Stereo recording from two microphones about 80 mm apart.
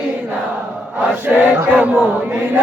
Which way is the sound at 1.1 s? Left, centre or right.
Right.